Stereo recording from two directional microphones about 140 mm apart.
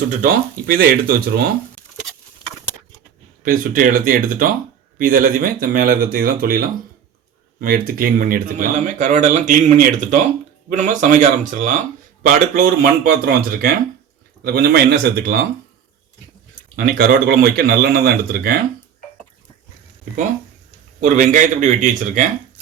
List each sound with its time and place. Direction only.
0.1 s speech: 80° right
3.4 s speech: 80° right
14.4 s speech: 90° right
16.7 s speech: 90° right
21.0 s speech: 65° right (ahead or behind)